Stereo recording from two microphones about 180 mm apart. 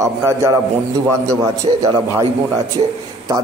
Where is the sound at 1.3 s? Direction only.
15° right (ahead or behind).